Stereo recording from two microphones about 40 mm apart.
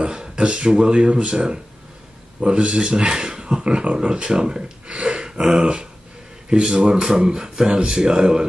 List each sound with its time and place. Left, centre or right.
0.0 s speech: right